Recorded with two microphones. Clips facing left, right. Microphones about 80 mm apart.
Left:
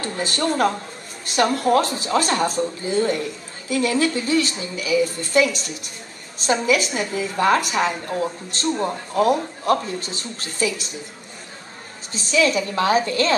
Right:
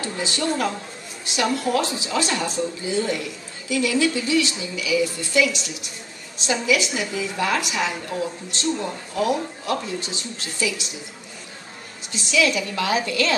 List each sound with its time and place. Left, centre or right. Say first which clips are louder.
0.0 s a woman's voice: left 2 dB; left
12.1 s a woman's voice: left 2 dB; left